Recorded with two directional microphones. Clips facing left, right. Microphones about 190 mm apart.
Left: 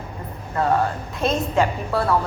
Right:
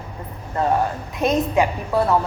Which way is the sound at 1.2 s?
15° right (ahead or behind).